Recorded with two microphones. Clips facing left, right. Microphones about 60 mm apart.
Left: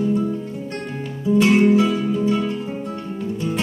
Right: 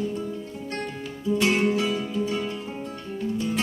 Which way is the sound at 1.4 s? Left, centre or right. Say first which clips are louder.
Left 8 dB; left.